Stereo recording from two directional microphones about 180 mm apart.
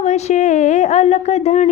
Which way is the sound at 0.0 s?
40° left (ahead or behind).